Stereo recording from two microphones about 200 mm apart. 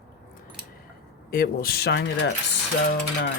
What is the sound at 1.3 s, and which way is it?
Speech, 45° left (ahead or behind).